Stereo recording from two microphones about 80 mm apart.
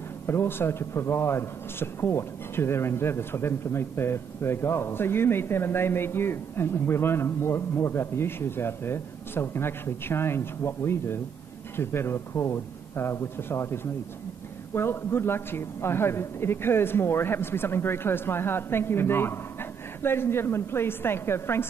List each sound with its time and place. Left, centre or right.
0.3 s a man's voice: left